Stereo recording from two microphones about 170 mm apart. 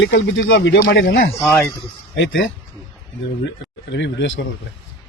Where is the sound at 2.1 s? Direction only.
90° left.